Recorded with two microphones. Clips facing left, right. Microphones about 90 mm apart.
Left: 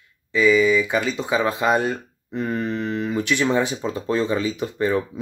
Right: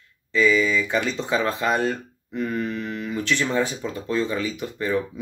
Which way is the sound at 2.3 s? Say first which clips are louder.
Left 2 dB; 30° left (ahead or behind).